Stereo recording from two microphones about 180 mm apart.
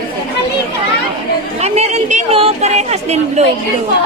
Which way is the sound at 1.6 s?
35° right (ahead or behind).